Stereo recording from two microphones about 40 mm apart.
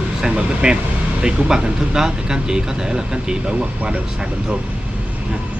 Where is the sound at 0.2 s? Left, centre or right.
Centre.